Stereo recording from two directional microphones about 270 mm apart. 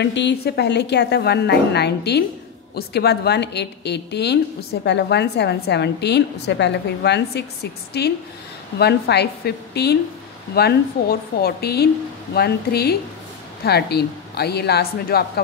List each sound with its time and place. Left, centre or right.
0.0 s a woman's voice: left